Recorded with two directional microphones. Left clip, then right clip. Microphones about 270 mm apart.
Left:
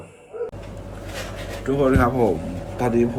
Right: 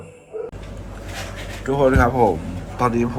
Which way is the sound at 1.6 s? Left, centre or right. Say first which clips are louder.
Right 2 dB; centre.